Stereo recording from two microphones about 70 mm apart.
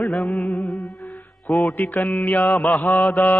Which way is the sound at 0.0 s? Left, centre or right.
Centre.